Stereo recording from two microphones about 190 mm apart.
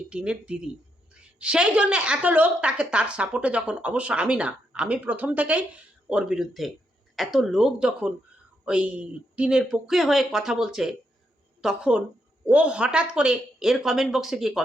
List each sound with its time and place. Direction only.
0.1 s a woman's voice: 5° right (ahead or behind)